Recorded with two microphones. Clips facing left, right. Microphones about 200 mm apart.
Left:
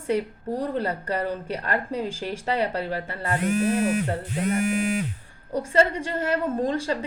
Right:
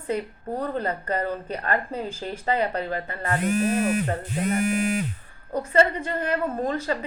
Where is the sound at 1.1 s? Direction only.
80° left.